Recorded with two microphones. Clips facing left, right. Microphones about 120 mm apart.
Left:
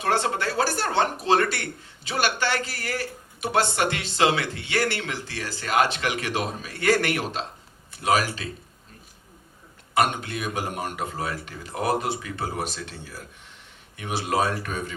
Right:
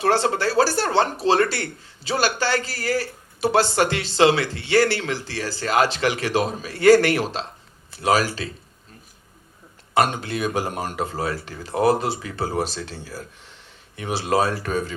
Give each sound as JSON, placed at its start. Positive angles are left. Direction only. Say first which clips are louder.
{"t": 0.0, "sound": "speech", "louder": "right 4 dB", "side_deg": -30}
{"t": 9.9, "sound": "speech", "louder": "right 3 dB", "side_deg": -30}